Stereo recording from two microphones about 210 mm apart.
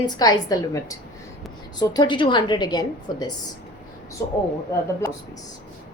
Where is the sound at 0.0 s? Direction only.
20° left (ahead or behind).